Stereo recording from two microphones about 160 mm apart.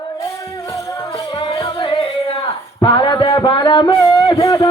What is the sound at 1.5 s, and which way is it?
Music, 30° left (ahead or behind).